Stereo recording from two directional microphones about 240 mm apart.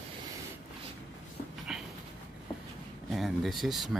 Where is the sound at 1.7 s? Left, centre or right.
Centre.